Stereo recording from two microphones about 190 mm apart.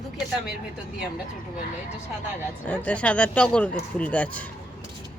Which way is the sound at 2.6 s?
5° left (ahead or behind).